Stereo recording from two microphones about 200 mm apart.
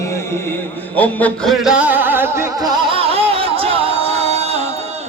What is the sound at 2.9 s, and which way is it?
Music, 30° right (ahead or behind).